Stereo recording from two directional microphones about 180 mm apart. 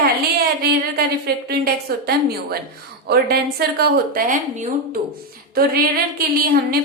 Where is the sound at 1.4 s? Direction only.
60° right (ahead or behind).